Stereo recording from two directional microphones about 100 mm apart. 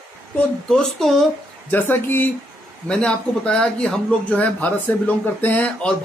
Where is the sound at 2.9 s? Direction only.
10° left (ahead or behind).